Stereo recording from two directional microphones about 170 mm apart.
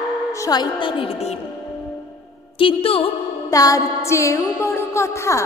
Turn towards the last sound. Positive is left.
turn(degrees=15)  # may be behind; listen again after turning